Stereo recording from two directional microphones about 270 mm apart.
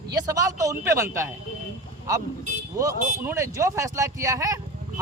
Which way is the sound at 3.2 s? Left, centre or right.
Centre.